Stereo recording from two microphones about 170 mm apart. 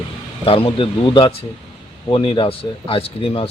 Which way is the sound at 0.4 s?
35° left (ahead or behind).